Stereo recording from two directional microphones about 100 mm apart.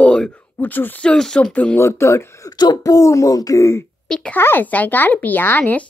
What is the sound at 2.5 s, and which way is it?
Speech, 45° left (ahead or behind).